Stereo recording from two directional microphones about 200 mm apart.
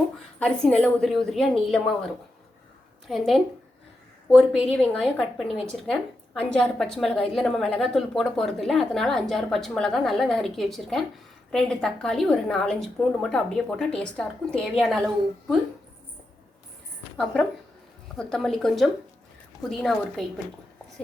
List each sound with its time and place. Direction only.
0.3 s a woman's voice: 5° left (ahead or behind)
3.1 s a woman's voice: centre (ahead or behind)
18.2 s a woman's voice: 5° left (ahead or behind)